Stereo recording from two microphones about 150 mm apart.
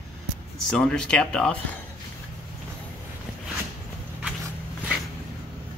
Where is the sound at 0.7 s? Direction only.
5° left (ahead or behind).